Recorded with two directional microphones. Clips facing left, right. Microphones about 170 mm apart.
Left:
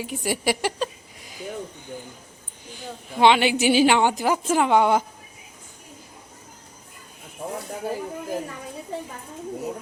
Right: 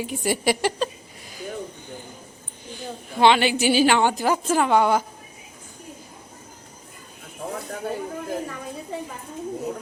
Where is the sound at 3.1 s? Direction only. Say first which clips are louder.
Even; 15° left (ahead or behind).